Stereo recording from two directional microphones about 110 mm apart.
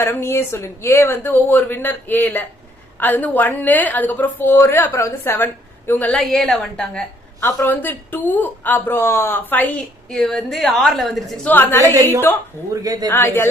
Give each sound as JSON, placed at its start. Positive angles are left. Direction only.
{"t": 0.0, "sound": "a woman's voice", "side_deg": 25}
{"t": 6.1, "sound": "a woman's voice", "side_deg": 5}
{"t": 7.4, "sound": "a woman's voice", "side_deg": 20}
{"t": 10.1, "sound": "a woman's voice", "side_deg": 5}
{"t": 11.4, "sound": "speech", "side_deg": 15}
{"t": 12.7, "sound": "speech", "side_deg": -35}
{"t": 13.1, "sound": "speech", "side_deg": 20}